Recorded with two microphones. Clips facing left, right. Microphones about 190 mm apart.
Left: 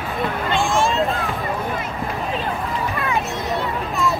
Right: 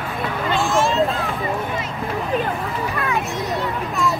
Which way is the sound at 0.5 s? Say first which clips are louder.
Right 1 dB; centre (ahead or behind).